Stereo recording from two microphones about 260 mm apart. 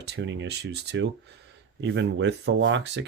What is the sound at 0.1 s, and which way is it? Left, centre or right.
Speech, right.